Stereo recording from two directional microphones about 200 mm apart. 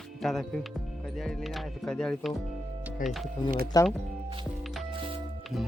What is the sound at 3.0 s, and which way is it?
Speech, 45° left (ahead or behind).